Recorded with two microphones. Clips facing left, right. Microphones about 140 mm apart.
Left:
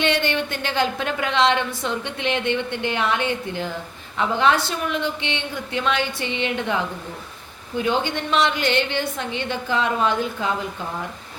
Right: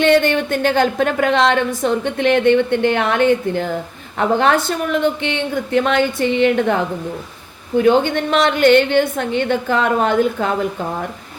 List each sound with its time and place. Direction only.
0.0 s a woman's voice: 50° right (ahead or behind)